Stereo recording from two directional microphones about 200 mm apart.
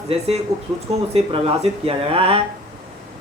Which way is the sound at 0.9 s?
30° right (ahead or behind).